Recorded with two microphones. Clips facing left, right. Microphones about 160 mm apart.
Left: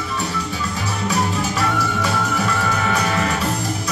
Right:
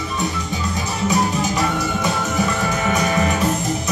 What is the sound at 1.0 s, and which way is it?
Music, 20° right (ahead or behind).